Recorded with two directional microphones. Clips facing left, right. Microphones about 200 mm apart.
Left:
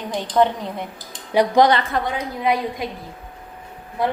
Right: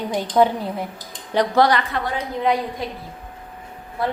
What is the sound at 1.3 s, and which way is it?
Speech, 15° left (ahead or behind).